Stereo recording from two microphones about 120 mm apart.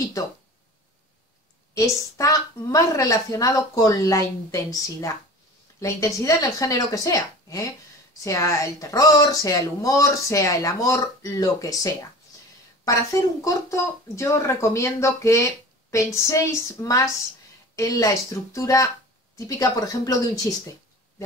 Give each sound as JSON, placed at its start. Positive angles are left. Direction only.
{"t": 0.2, "sound": "speech", "side_deg": 30}
{"t": 1.8, "sound": "speech", "side_deg": 25}